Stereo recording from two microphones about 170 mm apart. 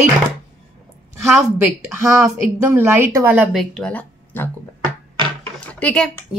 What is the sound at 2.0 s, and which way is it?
Speech, 15° right (ahead or behind).